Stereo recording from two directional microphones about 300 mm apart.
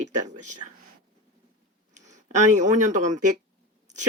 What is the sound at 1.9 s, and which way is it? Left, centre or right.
Speech, right.